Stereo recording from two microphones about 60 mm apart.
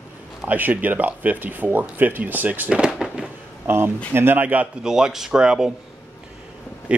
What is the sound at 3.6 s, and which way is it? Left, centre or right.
Speech, right.